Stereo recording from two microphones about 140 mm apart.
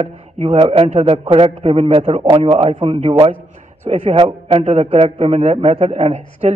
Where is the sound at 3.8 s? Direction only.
55° right (ahead or behind).